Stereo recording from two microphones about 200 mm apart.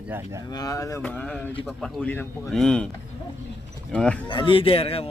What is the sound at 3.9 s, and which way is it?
Speech, 5° left (ahead or behind).